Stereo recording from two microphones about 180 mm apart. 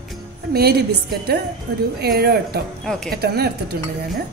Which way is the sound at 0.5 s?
60° right (ahead or behind).